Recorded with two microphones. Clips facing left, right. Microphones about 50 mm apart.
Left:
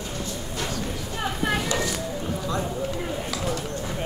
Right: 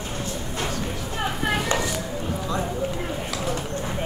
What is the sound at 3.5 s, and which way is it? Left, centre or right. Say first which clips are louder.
Clip-clop: right 1 dB; right.